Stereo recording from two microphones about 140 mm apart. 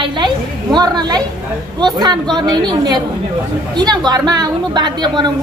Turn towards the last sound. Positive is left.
turn(degrees=-30)  # may be behind; listen again after turning